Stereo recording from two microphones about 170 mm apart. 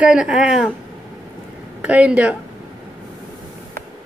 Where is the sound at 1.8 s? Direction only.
5° right (ahead or behind).